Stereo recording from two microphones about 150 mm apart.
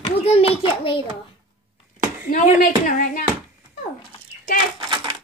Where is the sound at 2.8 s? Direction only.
60° left (ahead or behind).